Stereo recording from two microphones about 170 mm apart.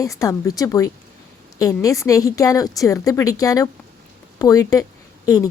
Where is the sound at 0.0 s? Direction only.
20° left (ahead or behind).